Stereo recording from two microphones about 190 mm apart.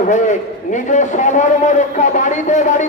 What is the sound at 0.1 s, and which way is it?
A man's voice, 40° left (ahead or behind).